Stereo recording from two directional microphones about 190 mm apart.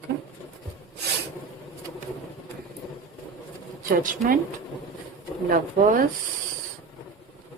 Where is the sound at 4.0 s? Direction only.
45° right (ahead or behind).